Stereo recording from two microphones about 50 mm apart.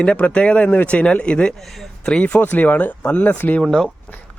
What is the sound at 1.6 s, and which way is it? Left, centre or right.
Speech, centre.